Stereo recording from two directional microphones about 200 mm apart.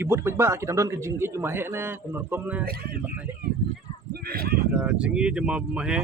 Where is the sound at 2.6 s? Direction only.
50° right (ahead or behind).